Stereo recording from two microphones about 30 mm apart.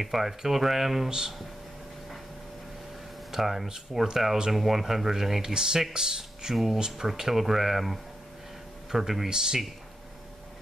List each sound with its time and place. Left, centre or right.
0.0 s speech: centre
3.3 s speech: centre
5.5 s speech: right
6.5 s speech: centre
9.3 s speech: right